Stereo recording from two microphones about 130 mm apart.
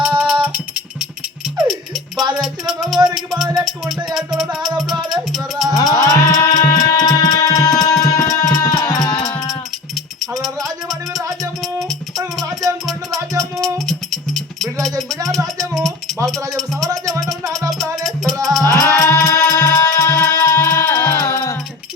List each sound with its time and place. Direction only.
0.0 s music: 10° right (ahead or behind)
2.4 s music: centre (ahead or behind)
3.2 s speech: centre (ahead or behind)
3.7 s music: centre (ahead or behind)
5.7 s music: 25° left (ahead or behind)
10.4 s music: centre (ahead or behind)
18.6 s music: 25° left (ahead or behind)